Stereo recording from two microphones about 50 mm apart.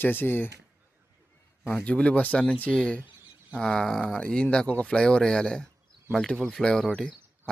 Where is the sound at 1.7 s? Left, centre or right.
Left.